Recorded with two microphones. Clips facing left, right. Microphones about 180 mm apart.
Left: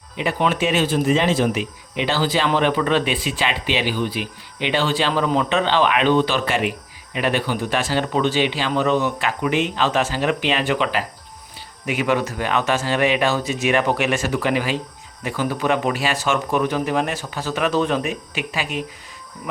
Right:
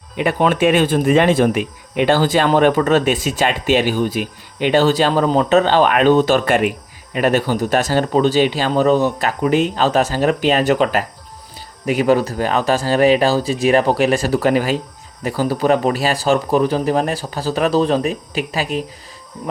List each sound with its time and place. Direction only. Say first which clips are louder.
0.2 s speech: right 5 dB; 50° right (ahead or behind)